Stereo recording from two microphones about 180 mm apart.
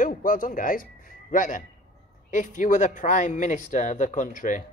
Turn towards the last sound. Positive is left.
turn(degrees=45)  # may be behind; listen again after turning